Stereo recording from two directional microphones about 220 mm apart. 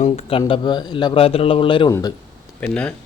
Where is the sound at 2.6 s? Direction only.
5° left (ahead or behind).